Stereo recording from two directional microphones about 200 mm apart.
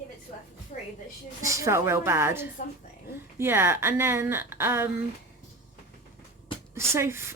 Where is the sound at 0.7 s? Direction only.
40° left (ahead or behind).